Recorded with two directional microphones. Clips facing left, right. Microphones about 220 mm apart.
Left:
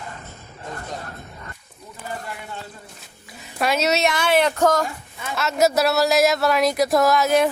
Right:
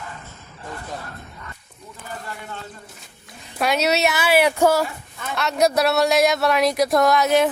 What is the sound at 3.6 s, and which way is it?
Speech, centre (ahead or behind).